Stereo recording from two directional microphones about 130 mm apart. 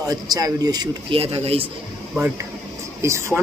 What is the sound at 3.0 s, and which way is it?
Speech, 20° right (ahead or behind).